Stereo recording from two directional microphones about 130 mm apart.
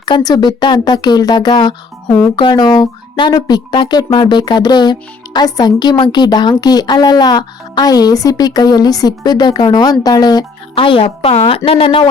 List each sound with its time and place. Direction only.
0.0 s speech: 35° left (ahead or behind)